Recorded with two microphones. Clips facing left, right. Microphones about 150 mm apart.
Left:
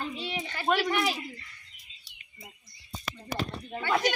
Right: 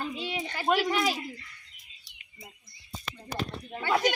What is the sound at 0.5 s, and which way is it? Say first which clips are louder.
Speech: right 1 dB; 15° right (ahead or behind).